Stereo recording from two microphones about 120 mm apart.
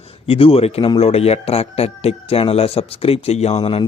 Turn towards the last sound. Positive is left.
turn(degrees=50)  # may be behind; listen again after turning